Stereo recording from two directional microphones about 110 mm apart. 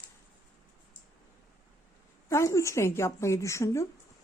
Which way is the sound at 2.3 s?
25° left (ahead or behind).